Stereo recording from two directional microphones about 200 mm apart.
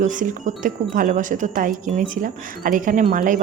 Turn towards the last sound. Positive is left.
turn(degrees=-45)  # may be behind; listen again after turning